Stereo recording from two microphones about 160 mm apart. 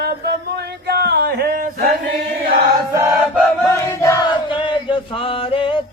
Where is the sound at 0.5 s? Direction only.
90° right; by 2.0 s 60° right (ahead or behind).